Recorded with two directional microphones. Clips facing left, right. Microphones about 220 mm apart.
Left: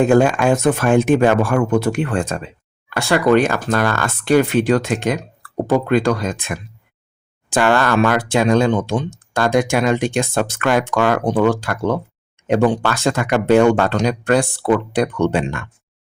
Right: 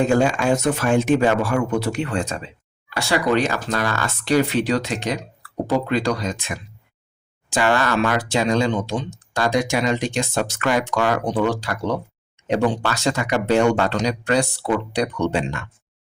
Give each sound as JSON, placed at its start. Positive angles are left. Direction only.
{"t": 0.0, "sound": "speech", "side_deg": 55}